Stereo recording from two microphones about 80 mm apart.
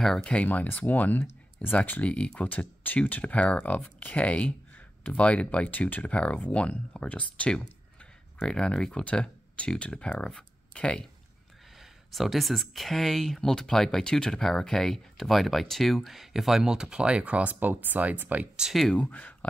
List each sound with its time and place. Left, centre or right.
0.0 s speech: centre
11.8 s speech: centre
18.7 s speech: centre
18.9 s speech: centre